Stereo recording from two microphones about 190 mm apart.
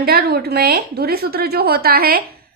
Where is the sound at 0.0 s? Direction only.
55° right (ahead or behind).